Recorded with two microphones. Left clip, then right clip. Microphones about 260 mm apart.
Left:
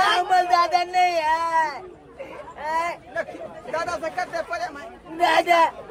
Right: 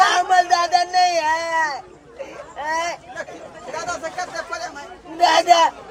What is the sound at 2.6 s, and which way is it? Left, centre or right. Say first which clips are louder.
Hubbub: right 2 dB; centre.